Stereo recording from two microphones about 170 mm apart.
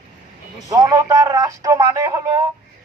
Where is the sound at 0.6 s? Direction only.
20° right (ahead or behind).